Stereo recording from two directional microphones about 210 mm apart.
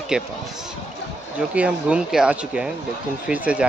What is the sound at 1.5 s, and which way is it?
Speech, 5° right (ahead or behind).